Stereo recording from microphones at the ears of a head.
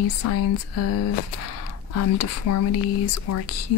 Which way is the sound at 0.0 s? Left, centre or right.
Left.